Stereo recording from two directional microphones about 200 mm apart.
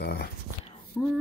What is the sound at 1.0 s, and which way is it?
Speech, 5° left (ahead or behind).